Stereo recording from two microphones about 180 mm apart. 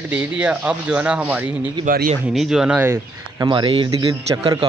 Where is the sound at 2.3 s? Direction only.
Centre (ahead or behind).